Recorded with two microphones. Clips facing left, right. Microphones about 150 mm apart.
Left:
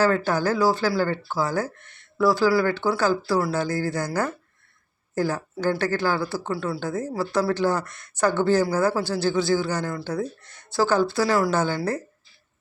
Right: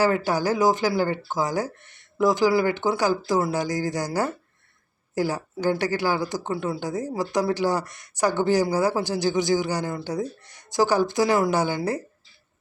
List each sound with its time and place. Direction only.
0.0 s speech: 15° right (ahead or behind)